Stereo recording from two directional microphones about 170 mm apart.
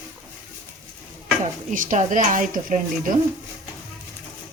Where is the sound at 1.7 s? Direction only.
50° right (ahead or behind).